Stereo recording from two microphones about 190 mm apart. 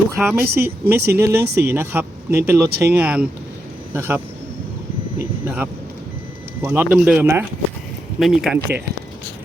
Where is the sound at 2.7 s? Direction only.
55° right (ahead or behind).